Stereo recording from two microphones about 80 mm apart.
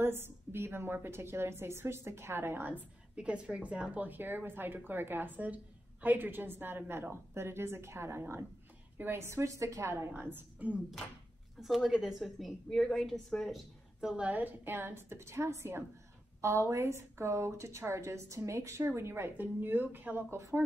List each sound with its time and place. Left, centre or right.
0.0 s speech: right
3.2 s a woman's voice: centre; by 10.1 s right
10.1 s speech: right
11.6 s a woman's voice: centre
14.0 s a woman's voice: centre; by 20.6 s right